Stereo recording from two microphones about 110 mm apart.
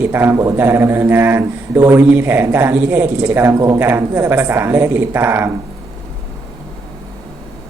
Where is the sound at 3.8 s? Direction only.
20° right (ahead or behind).